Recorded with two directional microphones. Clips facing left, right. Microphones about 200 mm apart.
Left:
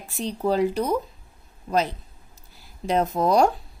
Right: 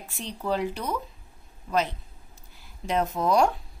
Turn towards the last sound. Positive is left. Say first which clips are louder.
# left 3 dB
turn(degrees=35)  # may be behind; listen again after turning